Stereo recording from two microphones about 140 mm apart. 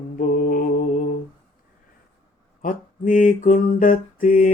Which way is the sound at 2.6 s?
75° left (ahead or behind).